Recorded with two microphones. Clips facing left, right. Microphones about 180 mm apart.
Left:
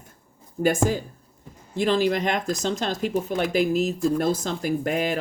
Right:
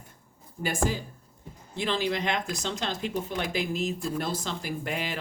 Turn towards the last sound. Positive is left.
turn(degrees=45)  # may be behind; listen again after turning